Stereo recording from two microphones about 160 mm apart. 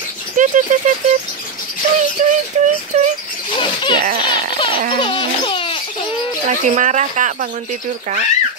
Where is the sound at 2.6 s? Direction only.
45° right (ahead or behind).